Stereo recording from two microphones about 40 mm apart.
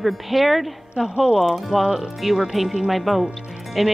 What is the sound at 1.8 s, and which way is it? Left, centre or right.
Speech, centre.